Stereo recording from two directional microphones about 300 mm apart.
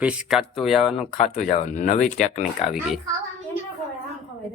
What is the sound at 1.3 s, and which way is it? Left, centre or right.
Speech, left.